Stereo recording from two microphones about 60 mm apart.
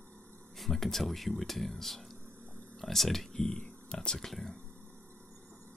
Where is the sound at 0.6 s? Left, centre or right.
Centre.